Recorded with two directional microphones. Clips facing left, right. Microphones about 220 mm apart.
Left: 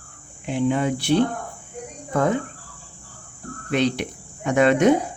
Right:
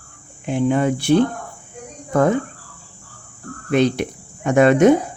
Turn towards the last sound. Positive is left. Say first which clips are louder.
# right 4 dB
turn(degrees=-50)  # may be behind; listen again after turning